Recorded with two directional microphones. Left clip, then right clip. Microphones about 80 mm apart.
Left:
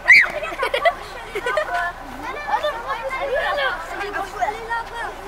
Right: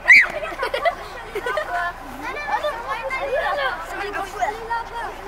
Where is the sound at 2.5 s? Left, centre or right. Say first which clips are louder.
Left 2 dB; left.